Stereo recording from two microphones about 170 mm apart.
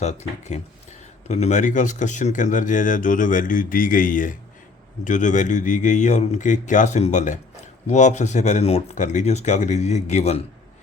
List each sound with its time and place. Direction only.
0.0 s speech: 40° left (ahead or behind)